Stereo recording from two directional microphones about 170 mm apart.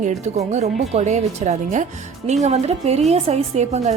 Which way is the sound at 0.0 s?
40° right (ahead or behind).